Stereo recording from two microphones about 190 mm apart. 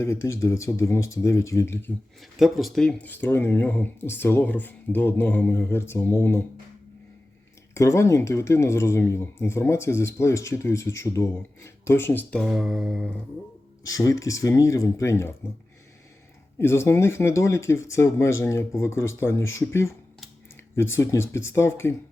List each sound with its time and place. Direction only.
0.0 s speech: 15° left (ahead or behind)
2.4 s speech: centre (ahead or behind)
7.7 s speech: 15° left (ahead or behind); by 13.1 s centre (ahead or behind)
13.8 s speech: 15° left (ahead or behind)
16.6 s speech: 15° left (ahead or behind)
20.9 s speech: 15° left (ahead or behind)